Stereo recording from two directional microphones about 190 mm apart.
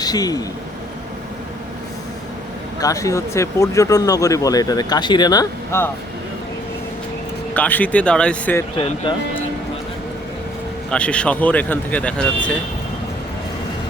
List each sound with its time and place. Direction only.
0.0 s a man's voice: 20° left (ahead or behind)
2.8 s speech: 15° left (ahead or behind)
7.5 s speech: 10° left (ahead or behind)
10.9 s speech: 5° left (ahead or behind)